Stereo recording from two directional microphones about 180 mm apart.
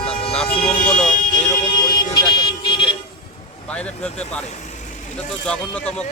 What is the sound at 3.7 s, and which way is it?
Speech, 5° left (ahead or behind).